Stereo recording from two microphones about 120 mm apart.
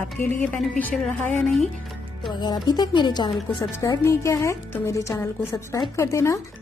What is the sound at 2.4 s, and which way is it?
Speech, 35° left (ahead or behind).